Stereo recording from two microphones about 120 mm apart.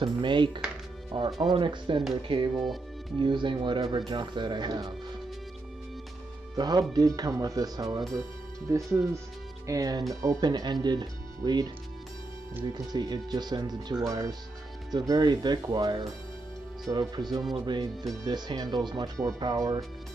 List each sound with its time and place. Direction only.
0.0 s speech: 40° right (ahead or behind)
2.5 s speech: centre (ahead or behind)
3.2 s speech: 40° right (ahead or behind)
6.5 s speech: 35° right (ahead or behind)
12.7 s speech: 35° right (ahead or behind)